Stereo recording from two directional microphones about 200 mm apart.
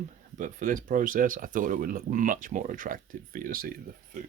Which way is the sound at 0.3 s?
40° right (ahead or behind).